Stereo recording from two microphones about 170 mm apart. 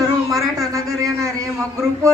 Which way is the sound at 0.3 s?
20° right (ahead or behind).